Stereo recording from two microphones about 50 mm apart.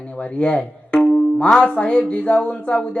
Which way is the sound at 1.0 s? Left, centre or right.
Left.